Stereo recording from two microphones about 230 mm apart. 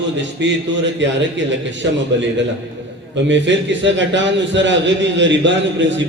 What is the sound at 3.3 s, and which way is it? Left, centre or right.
A man's voice, right.